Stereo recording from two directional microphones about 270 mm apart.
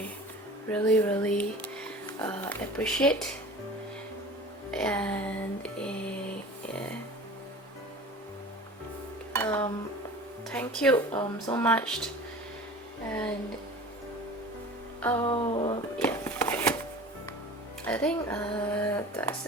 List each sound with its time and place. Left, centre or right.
0.7 s speech: centre
4.7 s a sound: centre
9.3 s dishes: centre
10.5 s speech: centre
10.9 s speech: centre
15.0 s speech: centre
16.0 s a sound: centre
17.8 s speech: centre